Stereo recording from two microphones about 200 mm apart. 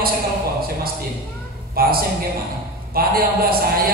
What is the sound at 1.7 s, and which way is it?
A man's voice, 50° right (ahead or behind).